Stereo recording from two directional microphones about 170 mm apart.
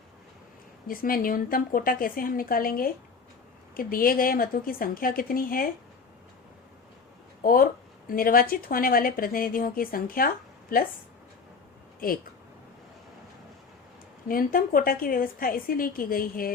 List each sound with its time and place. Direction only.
0.9 s speech: 55° left (ahead or behind)
7.4 s speech: 55° left (ahead or behind)
11.9 s speech: 55° left (ahead or behind)
14.3 s speech: 55° left (ahead or behind)